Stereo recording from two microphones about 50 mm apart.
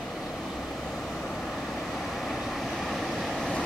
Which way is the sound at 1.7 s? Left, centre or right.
Centre.